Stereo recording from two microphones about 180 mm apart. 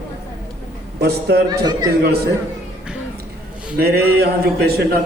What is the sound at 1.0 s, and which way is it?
Speech, 65° right (ahead or behind).